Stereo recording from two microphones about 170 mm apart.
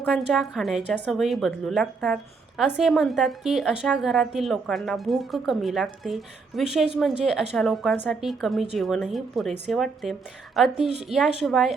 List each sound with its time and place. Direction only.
0.3 s a woman's voice: 5° right (ahead or behind)